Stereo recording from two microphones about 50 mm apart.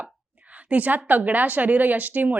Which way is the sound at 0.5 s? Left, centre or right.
Right.